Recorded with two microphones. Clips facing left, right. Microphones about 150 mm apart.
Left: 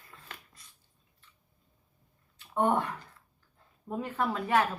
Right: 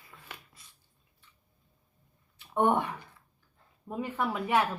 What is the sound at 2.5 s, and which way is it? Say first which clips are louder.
Speech: right 1 dB; 15° right (ahead or behind).